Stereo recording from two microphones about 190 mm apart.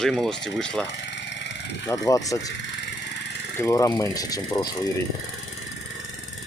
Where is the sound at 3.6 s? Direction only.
15° left (ahead or behind).